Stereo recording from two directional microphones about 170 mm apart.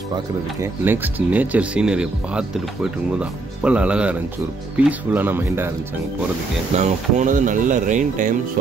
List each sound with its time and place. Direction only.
0.6 s speech: 10° right (ahead or behind)
6.8 s speech: 45° right (ahead or behind)